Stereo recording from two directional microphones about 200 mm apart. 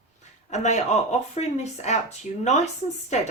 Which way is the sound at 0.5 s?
35° left (ahead or behind).